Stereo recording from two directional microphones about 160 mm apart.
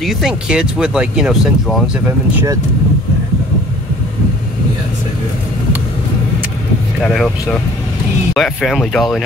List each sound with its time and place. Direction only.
0.0 s speech: 5° right (ahead or behind)
2.3 s speech: 20° right (ahead or behind)
7.0 s speech: centre (ahead or behind)
8.4 s speech: centre (ahead or behind)